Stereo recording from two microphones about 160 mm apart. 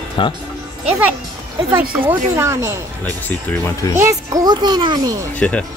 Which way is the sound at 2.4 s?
15° right (ahead or behind).